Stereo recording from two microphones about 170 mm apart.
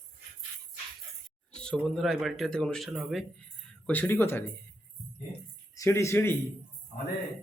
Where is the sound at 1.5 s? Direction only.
5° left (ahead or behind).